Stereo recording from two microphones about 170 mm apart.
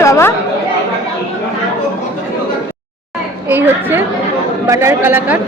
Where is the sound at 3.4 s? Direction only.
10° right (ahead or behind).